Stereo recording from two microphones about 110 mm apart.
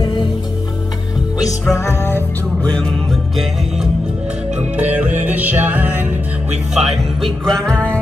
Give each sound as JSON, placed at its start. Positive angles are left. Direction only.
{"t": 1.4, "sound": "music", "side_deg": 25}
{"t": 2.7, "sound": "music", "side_deg": 5}
{"t": 4.7, "sound": "music", "side_deg": -15}
{"t": 6.7, "sound": "music", "side_deg": 0}